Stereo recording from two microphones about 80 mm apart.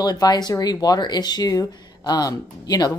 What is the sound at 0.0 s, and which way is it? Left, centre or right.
Speech, left.